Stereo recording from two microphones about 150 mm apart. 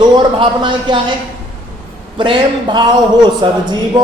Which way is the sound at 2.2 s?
30° right (ahead or behind).